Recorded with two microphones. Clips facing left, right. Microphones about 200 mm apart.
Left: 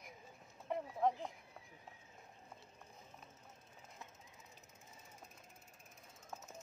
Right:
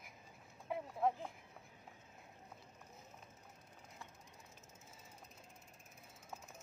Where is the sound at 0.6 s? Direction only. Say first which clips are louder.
Left 1 dB; 5° right (ahead or behind).